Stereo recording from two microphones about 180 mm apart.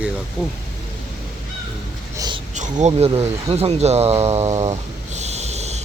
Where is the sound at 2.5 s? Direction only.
40° right (ahead or behind).